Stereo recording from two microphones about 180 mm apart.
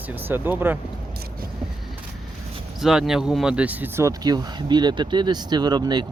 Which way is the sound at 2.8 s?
Centre (ahead or behind).